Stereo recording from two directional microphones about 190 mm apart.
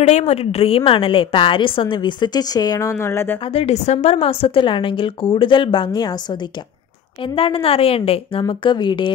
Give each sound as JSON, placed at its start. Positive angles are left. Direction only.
{"t": 0.0, "sound": "a woman's voice", "side_deg": 35}
{"t": 3.5, "sound": "a woman's voice", "side_deg": 35}
{"t": 7.3, "sound": "a woman's voice", "side_deg": 30}